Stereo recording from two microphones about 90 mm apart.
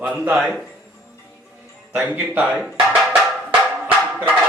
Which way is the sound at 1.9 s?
20° right (ahead or behind).